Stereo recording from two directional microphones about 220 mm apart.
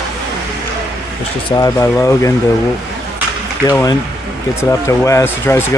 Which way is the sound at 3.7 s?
15° left (ahead or behind).